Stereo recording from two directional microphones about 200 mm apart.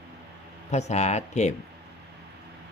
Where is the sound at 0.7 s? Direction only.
35° left (ahead or behind).